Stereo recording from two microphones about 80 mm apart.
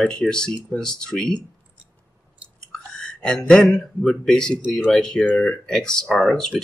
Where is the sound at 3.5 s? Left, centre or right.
Centre.